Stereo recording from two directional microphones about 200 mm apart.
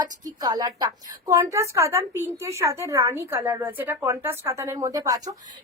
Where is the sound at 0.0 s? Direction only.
20° right (ahead or behind).